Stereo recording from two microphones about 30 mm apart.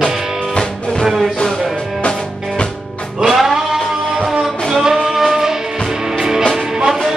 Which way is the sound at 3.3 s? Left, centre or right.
Centre.